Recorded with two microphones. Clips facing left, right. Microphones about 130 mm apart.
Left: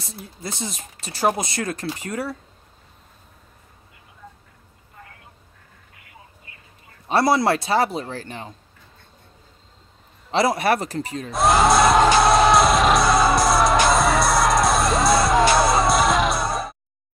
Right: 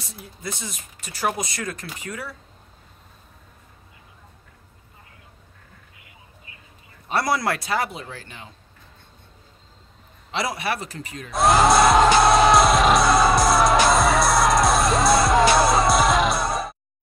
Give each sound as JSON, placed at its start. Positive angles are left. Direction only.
{"t": 0.0, "sound": "speech", "side_deg": 35}
{"t": 7.1, "sound": "speech", "side_deg": 30}
{"t": 10.3, "sound": "speech", "side_deg": 40}
{"t": 11.3, "sound": "music", "side_deg": 0}